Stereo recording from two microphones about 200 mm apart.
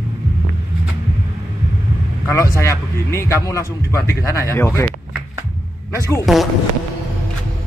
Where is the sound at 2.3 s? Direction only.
15° left (ahead or behind).